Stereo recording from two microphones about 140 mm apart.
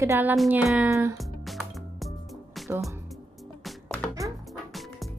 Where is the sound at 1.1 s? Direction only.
Centre (ahead or behind).